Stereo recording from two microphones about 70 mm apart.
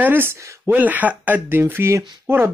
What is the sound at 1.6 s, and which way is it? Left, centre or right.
Speech, right.